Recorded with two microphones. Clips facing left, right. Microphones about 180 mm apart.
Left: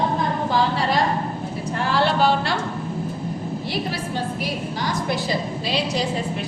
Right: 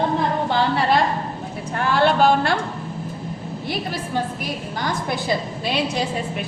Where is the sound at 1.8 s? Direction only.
55° right (ahead or behind).